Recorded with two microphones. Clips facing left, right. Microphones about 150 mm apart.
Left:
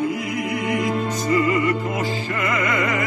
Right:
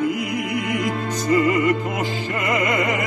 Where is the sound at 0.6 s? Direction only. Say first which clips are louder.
Left 1 dB; 20° left (ahead or behind).